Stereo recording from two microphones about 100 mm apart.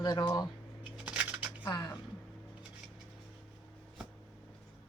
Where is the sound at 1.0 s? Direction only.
10° right (ahead or behind).